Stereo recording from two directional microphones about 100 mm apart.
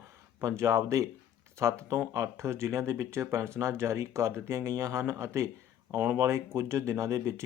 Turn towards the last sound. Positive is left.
turn(degrees=-30)  # may be behind; listen again after turning